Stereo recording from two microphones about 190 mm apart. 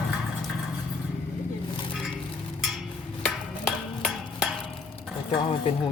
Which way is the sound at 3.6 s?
5° right (ahead or behind).